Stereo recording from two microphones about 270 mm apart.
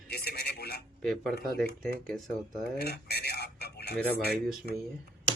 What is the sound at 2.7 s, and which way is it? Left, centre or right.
Dishes, left.